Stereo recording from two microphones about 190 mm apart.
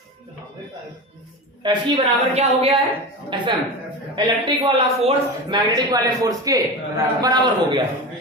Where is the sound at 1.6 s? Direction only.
30° right (ahead or behind).